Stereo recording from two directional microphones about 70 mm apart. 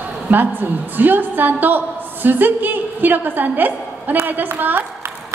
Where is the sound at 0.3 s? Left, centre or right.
Right.